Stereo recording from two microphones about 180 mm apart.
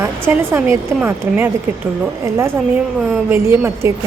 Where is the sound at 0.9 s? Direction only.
10° right (ahead or behind).